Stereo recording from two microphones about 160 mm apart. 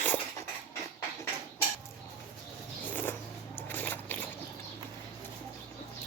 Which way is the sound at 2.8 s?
10° left (ahead or behind).